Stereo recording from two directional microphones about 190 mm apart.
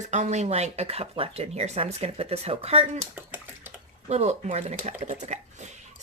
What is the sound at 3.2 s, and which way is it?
Typewriter, 10° right (ahead or behind).